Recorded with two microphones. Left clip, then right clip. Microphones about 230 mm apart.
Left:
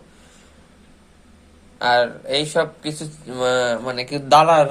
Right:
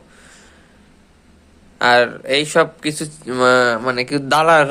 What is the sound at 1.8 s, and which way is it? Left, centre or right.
Speech, right.